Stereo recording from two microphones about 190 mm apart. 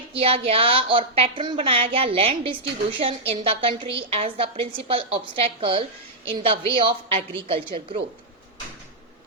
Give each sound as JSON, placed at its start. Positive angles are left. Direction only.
{"t": 0.1, "sound": "a woman's voice", "side_deg": -30}